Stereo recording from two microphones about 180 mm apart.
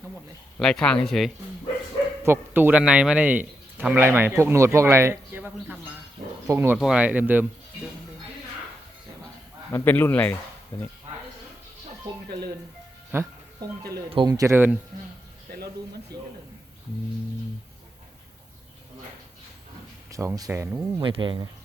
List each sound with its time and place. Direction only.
0.6 s speech: 5° left (ahead or behind)
2.2 s a man's voice: 10° right (ahead or behind)
9.7 s speech: 10° left (ahead or behind)
13.1 s music: 15° right (ahead or behind)
14.1 s a man's voice: 25° right (ahead or behind)
20.1 s speech: 20° right (ahead or behind)
21.0 s speech: 25° right (ahead or behind)